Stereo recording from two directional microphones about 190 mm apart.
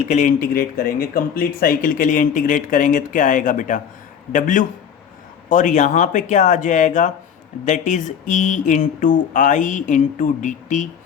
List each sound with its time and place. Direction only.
0.0 s speech: 40° left (ahead or behind)